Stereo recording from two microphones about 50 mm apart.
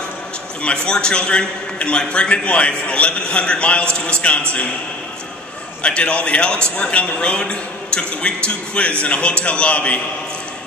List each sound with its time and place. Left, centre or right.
0.6 s a man's voice: left
5.8 s a man's voice: left